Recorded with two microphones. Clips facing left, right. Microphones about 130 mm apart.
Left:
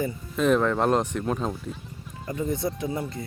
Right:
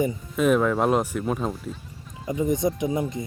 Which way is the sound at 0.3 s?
5° right (ahead or behind).